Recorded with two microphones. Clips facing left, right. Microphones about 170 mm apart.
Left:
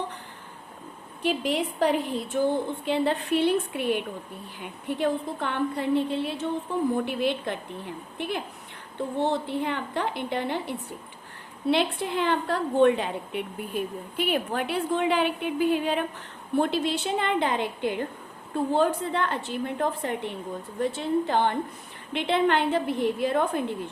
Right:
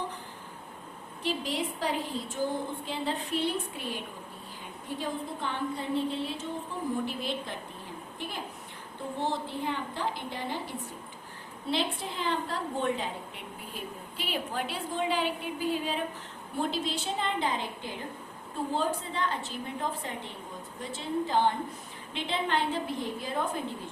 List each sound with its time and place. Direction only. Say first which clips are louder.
1.2 s a woman's voice: left 6 dB; 60° left (ahead or behind)